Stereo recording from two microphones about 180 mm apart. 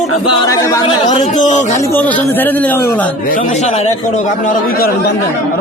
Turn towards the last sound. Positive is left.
turn(degrees=55)  # may be behind; listen again after turning